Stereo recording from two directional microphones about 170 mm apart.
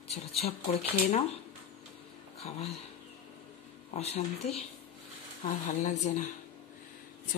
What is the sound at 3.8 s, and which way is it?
A woman's voice, 40° left (ahead or behind).